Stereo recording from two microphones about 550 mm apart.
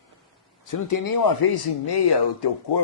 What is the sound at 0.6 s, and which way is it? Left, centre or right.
Speech, left.